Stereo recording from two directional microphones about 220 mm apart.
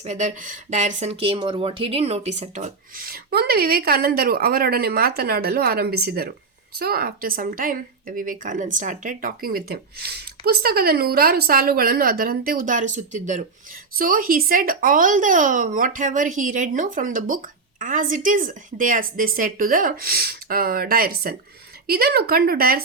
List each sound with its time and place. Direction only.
0.0 s speech: 30° right (ahead or behind)